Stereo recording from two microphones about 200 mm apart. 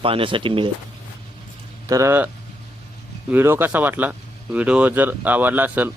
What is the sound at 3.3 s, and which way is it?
Speech, 10° right (ahead or behind).